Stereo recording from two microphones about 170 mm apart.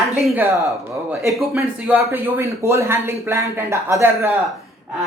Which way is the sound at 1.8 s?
10° right (ahead or behind).